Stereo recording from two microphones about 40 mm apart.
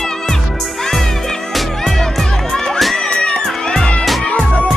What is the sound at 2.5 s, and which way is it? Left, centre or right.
Crowd, centre.